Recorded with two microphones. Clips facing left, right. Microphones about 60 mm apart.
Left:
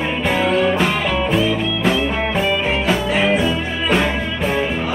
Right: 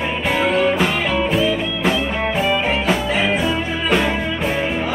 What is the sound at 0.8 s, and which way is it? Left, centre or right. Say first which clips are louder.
Music: even; centre.